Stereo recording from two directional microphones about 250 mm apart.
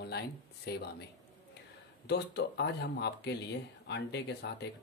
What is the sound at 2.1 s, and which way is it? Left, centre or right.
Speech, left.